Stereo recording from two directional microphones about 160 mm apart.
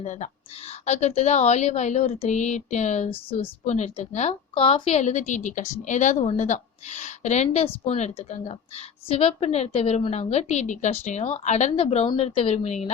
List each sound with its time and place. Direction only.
0.0 s a woman's voice: 50° left (ahead or behind)